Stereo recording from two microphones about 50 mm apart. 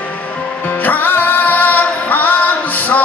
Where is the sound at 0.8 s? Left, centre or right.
Left.